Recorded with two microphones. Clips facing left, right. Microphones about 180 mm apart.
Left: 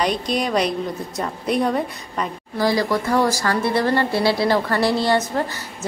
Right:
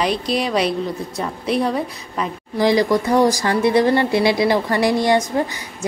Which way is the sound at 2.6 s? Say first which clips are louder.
Right 4 dB; 20° right (ahead or behind).